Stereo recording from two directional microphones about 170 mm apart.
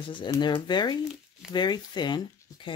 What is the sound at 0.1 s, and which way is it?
Speech, 25° left (ahead or behind).